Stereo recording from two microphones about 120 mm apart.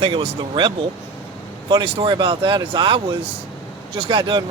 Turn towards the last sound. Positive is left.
turn(degrees=-40)  # may be behind; listen again after turning